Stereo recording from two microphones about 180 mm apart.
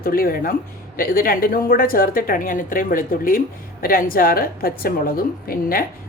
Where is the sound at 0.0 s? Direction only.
55° left (ahead or behind).